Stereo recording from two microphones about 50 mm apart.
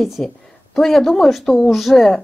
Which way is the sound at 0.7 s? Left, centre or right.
Centre.